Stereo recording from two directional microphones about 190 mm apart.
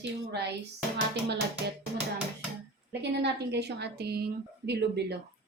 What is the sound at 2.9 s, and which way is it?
A woman's voice, 65° right (ahead or behind).